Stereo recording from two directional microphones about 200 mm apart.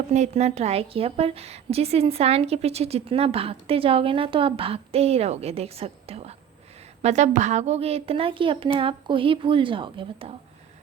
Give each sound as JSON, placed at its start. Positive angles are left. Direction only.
{"t": 0.1, "sound": "a woman's voice", "side_deg": -35}